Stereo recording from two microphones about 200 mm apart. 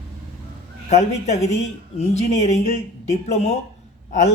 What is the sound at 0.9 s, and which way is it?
Speech, 35° left (ahead or behind).